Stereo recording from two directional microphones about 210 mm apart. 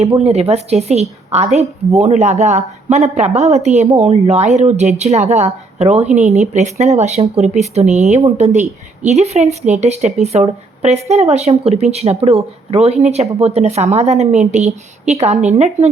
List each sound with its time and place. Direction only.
0.1 s a woman's voice: 30° right (ahead or behind)